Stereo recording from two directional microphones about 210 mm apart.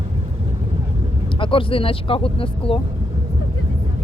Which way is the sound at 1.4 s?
25° left (ahead or behind).